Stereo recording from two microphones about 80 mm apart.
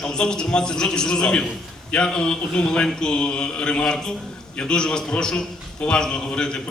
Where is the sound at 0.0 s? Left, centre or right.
Centre.